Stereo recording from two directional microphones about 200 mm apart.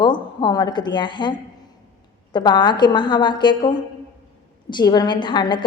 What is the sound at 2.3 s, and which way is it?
A woman's voice, 20° left (ahead or behind).